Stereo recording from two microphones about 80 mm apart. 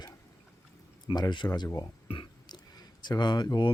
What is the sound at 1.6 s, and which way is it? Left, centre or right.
Speech, left.